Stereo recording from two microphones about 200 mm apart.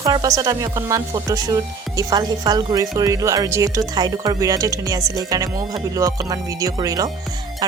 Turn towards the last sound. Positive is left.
turn(degrees=-20)  # may be behind; listen again after turning